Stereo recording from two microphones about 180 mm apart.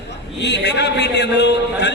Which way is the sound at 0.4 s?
75° left (ahead or behind).